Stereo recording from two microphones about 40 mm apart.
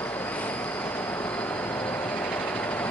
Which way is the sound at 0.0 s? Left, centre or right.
Left.